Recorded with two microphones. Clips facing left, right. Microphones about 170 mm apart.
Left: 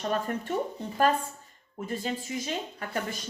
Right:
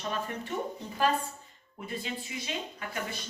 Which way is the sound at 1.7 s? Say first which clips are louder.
Left 5 dB; 40° left (ahead or behind).